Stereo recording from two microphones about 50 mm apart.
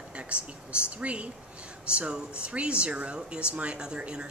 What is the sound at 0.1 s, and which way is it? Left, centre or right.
Speech, right.